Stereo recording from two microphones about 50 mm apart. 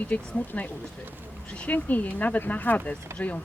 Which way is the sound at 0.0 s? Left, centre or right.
Left.